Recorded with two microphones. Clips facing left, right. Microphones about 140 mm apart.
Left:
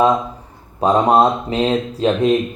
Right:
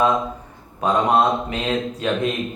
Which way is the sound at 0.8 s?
35° left (ahead or behind).